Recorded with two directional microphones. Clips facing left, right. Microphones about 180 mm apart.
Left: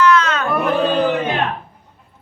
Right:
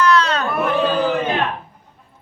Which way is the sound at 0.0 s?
35° right (ahead or behind).